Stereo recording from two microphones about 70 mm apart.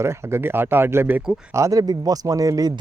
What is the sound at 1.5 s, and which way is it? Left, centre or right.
Speech, right.